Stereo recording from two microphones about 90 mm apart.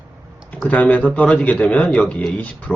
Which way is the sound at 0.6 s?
15° left (ahead or behind).